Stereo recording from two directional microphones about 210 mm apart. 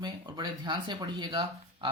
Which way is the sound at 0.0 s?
20° right (ahead or behind).